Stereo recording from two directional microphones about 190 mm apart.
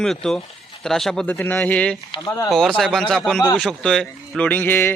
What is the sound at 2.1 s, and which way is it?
Speech, 20° left (ahead or behind).